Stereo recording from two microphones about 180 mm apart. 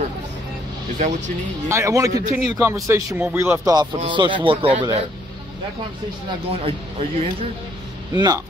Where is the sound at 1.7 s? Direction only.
15° right (ahead or behind).